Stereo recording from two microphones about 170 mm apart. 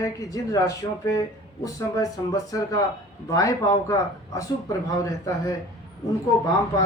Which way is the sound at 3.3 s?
20° left (ahead or behind).